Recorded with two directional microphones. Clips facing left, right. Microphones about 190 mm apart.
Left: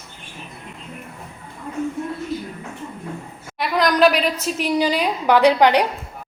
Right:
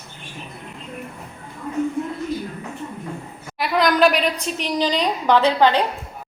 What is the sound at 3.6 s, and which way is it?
A woman's voice, centre (ahead or behind).